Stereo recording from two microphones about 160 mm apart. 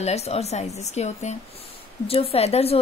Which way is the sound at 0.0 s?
40° left (ahead or behind).